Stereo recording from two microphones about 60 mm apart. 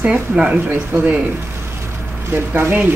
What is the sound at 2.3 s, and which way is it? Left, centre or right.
Speech, right.